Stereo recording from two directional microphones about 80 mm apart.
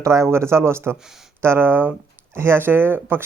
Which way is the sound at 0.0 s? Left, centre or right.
Right.